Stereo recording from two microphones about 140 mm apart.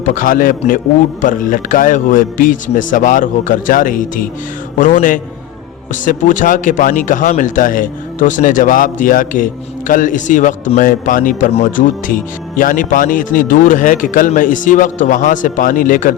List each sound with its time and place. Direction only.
0.0 s speech: 70° left (ahead or behind)